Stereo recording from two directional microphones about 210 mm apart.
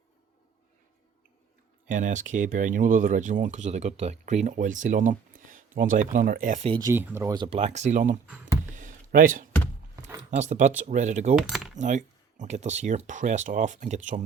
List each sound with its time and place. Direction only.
1.9 s speech: 35° right (ahead or behind)
6.7 s speech: 20° right (ahead or behind)
7.6 s speech: 35° right (ahead or behind)
8.7 s a sound: 40° right (ahead or behind)
10.3 s speech: 35° right (ahead or behind)
11.3 s speech: centre (ahead or behind)
11.8 s speech: 35° right (ahead or behind)